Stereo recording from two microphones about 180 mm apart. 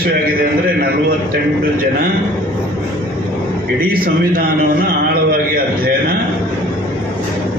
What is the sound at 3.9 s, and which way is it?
Speech, 55° right (ahead or behind).